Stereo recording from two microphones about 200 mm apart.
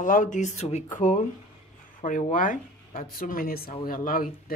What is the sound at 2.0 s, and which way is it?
A woman's voice, 40° left (ahead or behind).